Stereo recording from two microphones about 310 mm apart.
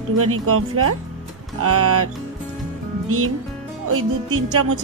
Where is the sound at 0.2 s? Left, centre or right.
Right.